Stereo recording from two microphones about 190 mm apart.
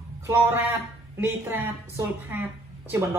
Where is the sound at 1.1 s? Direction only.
10° right (ahead or behind).